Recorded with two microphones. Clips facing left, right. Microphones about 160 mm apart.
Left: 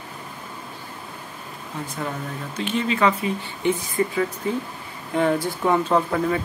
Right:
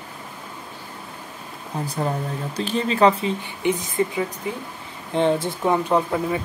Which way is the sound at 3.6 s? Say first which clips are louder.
Even; 15° right (ahead or behind).